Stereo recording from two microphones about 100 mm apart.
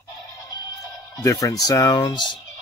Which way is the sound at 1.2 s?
35° left (ahead or behind).